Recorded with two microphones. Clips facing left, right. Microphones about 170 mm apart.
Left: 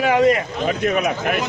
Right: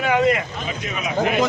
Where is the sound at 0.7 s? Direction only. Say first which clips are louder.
Left 12 dB; 55° left (ahead or behind).